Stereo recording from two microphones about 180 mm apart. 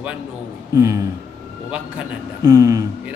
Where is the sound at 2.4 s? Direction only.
20° right (ahead or behind).